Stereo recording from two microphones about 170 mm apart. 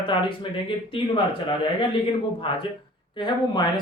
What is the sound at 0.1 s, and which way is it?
A woman's voice, 30° left (ahead or behind).